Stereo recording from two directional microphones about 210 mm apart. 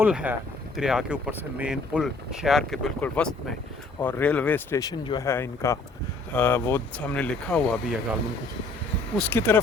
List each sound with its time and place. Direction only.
0.0 s speech: 5° right (ahead or behind)
9.1 s speech: 10° left (ahead or behind)